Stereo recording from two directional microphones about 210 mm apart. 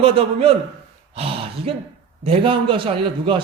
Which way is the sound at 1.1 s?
25° right (ahead or behind).